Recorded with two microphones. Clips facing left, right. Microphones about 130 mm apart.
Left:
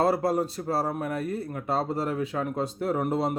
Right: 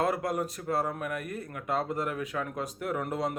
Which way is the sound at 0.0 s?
30° left (ahead or behind).